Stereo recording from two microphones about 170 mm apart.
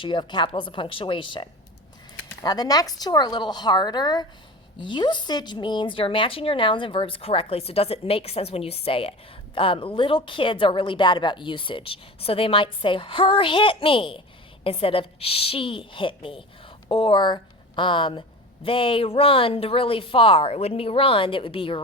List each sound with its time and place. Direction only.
0.0 s a woman's voice: 30° left (ahead or behind)